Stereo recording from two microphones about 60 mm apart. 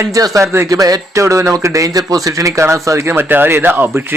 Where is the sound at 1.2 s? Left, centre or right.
Right.